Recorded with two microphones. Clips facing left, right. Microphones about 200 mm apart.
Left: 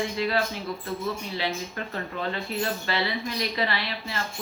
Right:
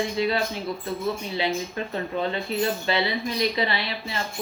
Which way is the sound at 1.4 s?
20° right (ahead or behind).